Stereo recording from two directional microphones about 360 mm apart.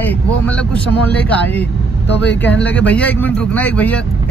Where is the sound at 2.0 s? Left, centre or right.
Left.